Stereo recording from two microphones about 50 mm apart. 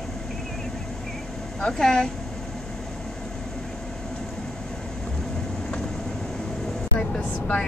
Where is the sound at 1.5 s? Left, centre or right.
Centre.